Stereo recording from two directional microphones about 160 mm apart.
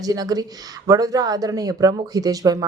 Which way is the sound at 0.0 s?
25° right (ahead or behind).